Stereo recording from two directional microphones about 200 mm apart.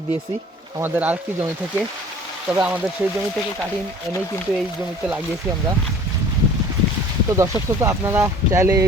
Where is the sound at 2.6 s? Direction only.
10° right (ahead or behind).